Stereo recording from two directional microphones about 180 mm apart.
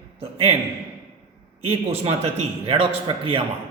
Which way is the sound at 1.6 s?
35° right (ahead or behind).